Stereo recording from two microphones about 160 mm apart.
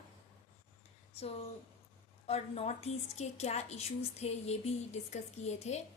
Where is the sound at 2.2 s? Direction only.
40° left (ahead or behind).